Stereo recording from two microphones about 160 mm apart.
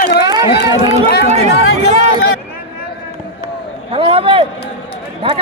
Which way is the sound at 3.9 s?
35° right (ahead or behind).